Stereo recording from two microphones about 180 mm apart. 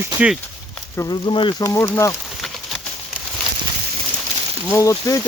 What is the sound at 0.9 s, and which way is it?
Speech, 20° left (ahead or behind).